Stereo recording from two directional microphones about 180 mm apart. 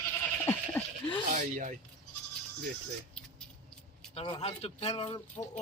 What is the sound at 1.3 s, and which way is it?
Speech, 45° right (ahead or behind).